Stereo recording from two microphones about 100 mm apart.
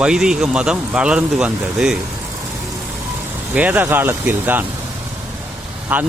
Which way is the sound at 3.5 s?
15° right (ahead or behind).